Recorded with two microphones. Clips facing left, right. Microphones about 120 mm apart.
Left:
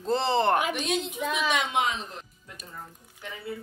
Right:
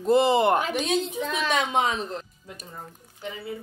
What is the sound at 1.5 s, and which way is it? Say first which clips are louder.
Speech: right 3 dB; 35° right (ahead or behind).